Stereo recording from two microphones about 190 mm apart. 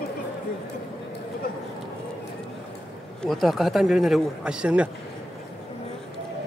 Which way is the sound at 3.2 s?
Centre (ahead or behind).